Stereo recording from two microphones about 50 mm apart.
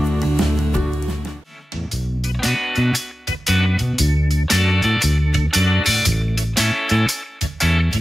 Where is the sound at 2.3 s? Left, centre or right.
Centre.